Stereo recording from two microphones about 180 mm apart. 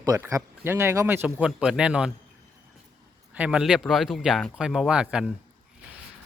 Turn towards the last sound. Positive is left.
turn(degrees=-5)  # may be behind; listen again after turning